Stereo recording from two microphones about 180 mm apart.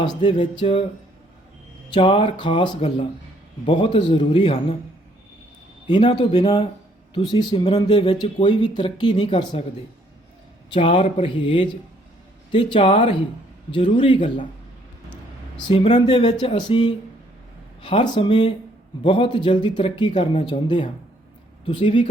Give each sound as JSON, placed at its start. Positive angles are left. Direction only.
{"t": 0.0, "sound": "speech", "side_deg": 25}
{"t": 1.9, "sound": "speech", "side_deg": 30}
{"t": 5.9, "sound": "speech", "side_deg": 25}
{"t": 10.7, "sound": "speech", "side_deg": 30}
{"t": 12.7, "sound": "speech", "side_deg": 30}
{"t": 15.7, "sound": "speech", "side_deg": 30}